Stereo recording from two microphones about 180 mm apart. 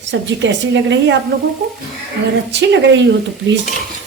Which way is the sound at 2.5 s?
75° right (ahead or behind).